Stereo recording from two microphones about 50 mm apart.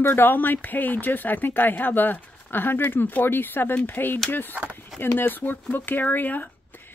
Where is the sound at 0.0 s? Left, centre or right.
Left.